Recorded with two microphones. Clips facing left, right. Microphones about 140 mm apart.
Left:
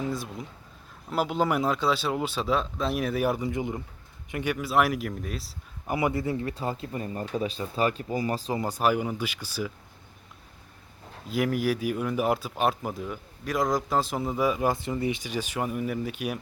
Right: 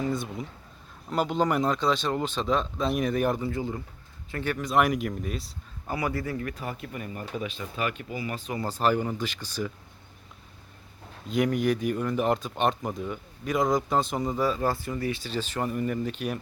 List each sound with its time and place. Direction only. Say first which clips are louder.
0.0 s speech: right 2 dB; centre (ahead or behind)
5.9 s speech: left 3 dB; 20° left (ahead or behind)
8.5 s speech: right 1 dB; 15° left (ahead or behind)
11.3 s speech: right 1 dB; 5° left (ahead or behind)